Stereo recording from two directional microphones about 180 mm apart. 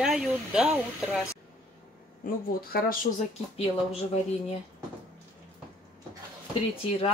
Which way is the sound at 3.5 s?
35° left (ahead or behind).